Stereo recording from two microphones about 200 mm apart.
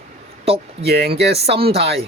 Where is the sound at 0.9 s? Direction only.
55° right (ahead or behind).